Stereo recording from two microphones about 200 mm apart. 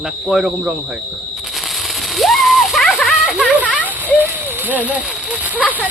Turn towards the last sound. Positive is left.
turn(degrees=-5)  # may be behind; listen again after turning